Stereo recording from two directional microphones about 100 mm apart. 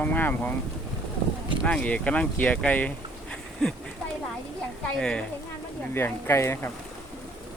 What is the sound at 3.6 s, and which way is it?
Speech, 5° left (ahead or behind).